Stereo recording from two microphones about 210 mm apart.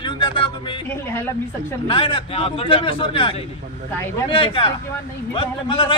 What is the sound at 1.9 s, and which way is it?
Speech, 25° left (ahead or behind).